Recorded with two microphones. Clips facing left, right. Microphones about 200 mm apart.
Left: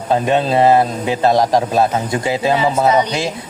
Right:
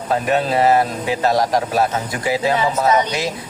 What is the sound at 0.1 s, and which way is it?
A man's voice, 30° left (ahead or behind).